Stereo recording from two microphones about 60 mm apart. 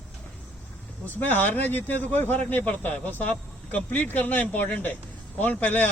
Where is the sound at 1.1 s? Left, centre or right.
Left.